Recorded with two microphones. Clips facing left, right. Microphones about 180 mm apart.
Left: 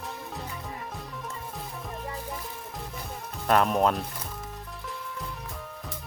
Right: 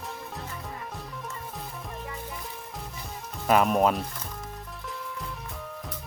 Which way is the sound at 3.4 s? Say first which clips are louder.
Right 1 dB; 5° right (ahead or behind).